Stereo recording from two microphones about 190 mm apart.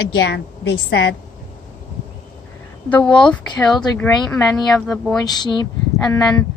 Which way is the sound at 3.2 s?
5° left (ahead or behind).